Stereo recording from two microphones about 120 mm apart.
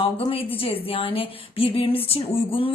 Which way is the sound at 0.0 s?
45° left (ahead or behind).